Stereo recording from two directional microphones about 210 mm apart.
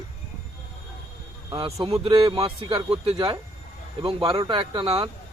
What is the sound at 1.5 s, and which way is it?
Speech, 25° right (ahead or behind).